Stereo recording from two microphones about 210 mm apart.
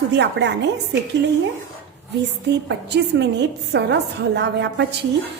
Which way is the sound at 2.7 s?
55° right (ahead or behind).